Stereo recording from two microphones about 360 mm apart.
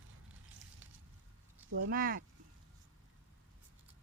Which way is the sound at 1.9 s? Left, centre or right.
Right.